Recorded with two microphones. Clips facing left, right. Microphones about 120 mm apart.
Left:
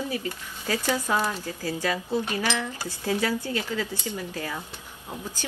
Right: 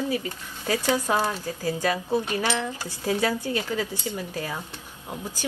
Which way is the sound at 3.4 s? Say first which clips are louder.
Right 2 dB; 15° right (ahead or behind).